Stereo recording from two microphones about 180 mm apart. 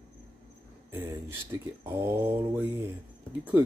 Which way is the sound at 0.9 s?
10° right (ahead or behind).